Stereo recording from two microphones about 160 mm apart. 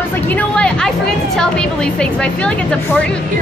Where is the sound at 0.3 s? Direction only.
10° left (ahead or behind).